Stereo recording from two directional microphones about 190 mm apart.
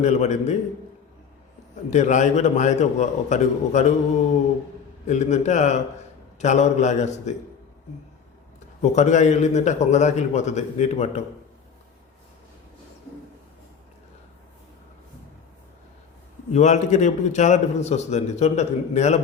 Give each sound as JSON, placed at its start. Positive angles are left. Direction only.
{"t": 0.0, "sound": "a man's voice", "side_deg": 40}
{"t": 1.9, "sound": "a man's voice", "side_deg": 40}
{"t": 5.0, "sound": "a man's voice", "side_deg": 35}
{"t": 8.8, "sound": "a man's voice", "side_deg": 40}
{"t": 16.5, "sound": "a man's voice", "side_deg": 35}